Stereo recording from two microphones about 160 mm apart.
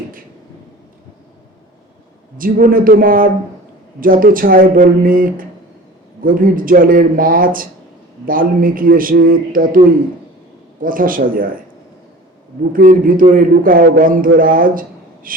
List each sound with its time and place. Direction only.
2.4 s a man's voice: 60° right (ahead or behind)
10.8 s a man's voice: 60° right (ahead or behind)
12.7 s a man's voice: 60° right (ahead or behind)